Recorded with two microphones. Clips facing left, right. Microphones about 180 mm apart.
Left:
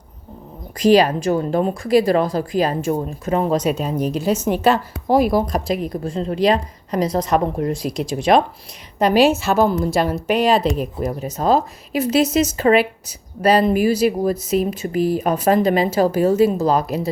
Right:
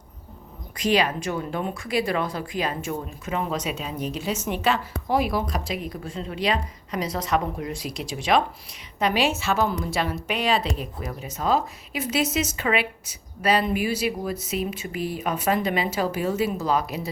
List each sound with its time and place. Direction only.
0.8 s a woman's voice: 35° left (ahead or behind)